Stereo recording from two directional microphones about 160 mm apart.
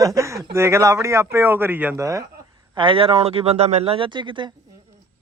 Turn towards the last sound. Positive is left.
turn(degrees=-30)  # may be behind; listen again after turning